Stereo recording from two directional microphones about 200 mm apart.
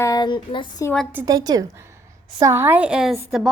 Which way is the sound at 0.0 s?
20° left (ahead or behind).